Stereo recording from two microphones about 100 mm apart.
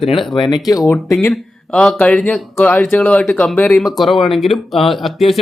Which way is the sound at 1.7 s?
10° left (ahead or behind).